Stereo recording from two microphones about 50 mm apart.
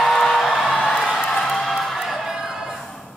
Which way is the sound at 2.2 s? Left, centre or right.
Centre.